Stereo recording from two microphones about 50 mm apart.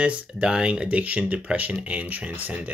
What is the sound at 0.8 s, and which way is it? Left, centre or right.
Speech, right.